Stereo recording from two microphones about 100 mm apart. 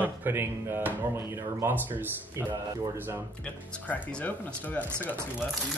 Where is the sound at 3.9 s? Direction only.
15° left (ahead or behind).